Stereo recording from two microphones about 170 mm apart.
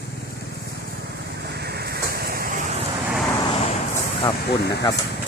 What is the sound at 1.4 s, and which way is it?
Vehicle, 75° right (ahead or behind).